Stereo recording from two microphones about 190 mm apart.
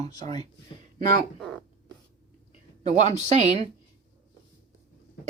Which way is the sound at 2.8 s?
35° right (ahead or behind).